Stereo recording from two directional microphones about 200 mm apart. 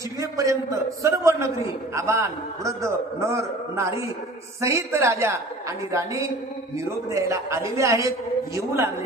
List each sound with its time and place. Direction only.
0.2 s a man's voice: 15° right (ahead or behind)